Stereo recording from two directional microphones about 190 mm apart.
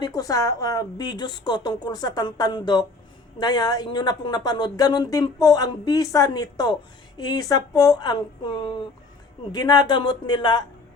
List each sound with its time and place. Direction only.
0.0 s a woman's voice: 20° left (ahead or behind)